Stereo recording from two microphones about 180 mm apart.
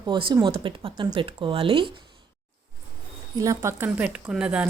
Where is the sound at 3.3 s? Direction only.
20° right (ahead or behind).